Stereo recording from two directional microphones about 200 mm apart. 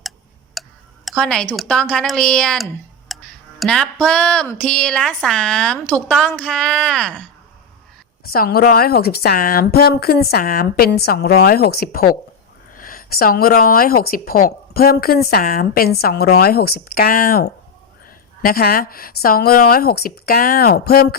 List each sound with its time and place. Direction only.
0.6 s tick-tock: centre (ahead or behind)
1.0 s a woman's voice: 5° left (ahead or behind)
3.1 s music: centre (ahead or behind)
4.0 s a woman's voice: 5° left (ahead or behind)
8.2 s speech: 50° left (ahead or behind)